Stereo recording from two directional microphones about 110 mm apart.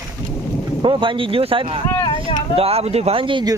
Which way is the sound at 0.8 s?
45° right (ahead or behind).